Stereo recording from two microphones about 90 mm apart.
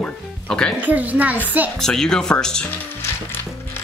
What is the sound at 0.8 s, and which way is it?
Speech, 15° right (ahead or behind).